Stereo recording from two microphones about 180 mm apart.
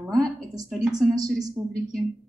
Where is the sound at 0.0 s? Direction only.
Centre (ahead or behind).